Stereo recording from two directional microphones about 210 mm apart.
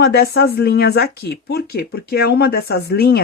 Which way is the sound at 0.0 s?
50° left (ahead or behind).